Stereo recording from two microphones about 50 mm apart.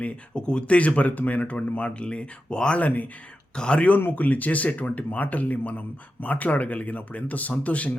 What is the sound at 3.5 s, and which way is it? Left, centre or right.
Speech, centre.